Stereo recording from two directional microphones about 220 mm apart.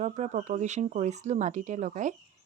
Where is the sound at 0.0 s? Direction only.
30° right (ahead or behind).